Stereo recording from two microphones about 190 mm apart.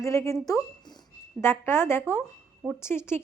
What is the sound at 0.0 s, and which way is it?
A woman's voice, 15° left (ahead or behind).